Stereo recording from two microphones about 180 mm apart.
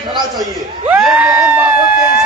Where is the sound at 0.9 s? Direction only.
5° right (ahead or behind).